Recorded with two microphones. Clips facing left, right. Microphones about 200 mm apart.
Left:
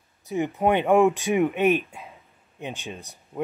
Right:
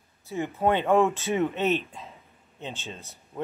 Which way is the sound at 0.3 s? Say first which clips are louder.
Left 3 dB; 15° left (ahead or behind).